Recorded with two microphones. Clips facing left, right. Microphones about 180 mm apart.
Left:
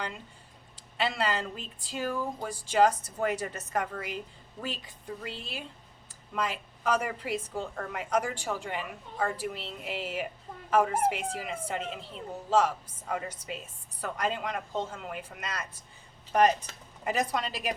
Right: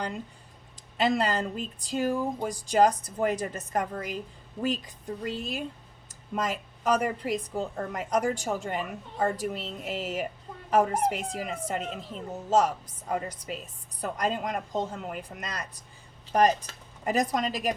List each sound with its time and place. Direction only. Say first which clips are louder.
0.9 s a woman's voice: right 4 dB; 40° right (ahead or behind)
2.4 s speech: right 5 dB; 15° right (ahead or behind)
2.6 s a woman's voice: right 2 dB; 40° right (ahead or behind)
2.9 s speech: right 3 dB; 15° right (ahead or behind)
3.2 s a woman's voice: right 2 dB; 35° right (ahead or behind)